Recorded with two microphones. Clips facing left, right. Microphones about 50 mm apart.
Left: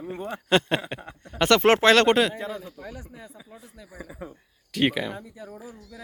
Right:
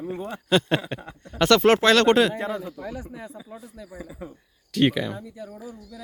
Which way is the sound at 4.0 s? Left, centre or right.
Left.